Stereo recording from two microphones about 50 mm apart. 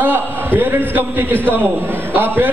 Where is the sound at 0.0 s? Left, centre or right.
Right.